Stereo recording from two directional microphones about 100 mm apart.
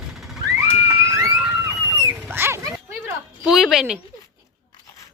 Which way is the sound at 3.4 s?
5° right (ahead or behind).